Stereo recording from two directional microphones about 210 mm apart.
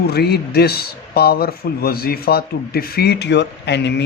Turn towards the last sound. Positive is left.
turn(degrees=55)  # may be behind; listen again after turning